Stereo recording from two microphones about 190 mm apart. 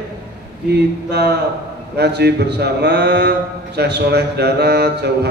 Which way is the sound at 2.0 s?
60° right (ahead or behind).